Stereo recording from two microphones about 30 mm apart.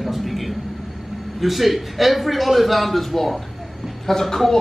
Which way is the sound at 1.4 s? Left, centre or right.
Centre.